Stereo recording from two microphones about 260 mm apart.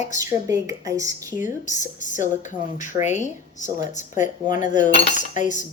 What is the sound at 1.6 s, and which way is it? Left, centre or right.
Speech, left.